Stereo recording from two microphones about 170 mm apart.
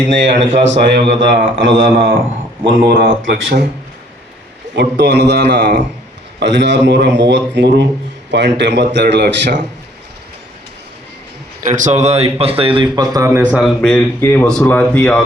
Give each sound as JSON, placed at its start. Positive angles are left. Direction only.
{"t": 0.1, "sound": "a man's voice", "side_deg": -90}
{"t": 2.6, "sound": "speech", "side_deg": -60}
{"t": 4.7, "sound": "a man's voice", "side_deg": -90}
{"t": 11.7, "sound": "speech", "side_deg": -45}
{"t": 13.8, "sound": "speech", "side_deg": 10}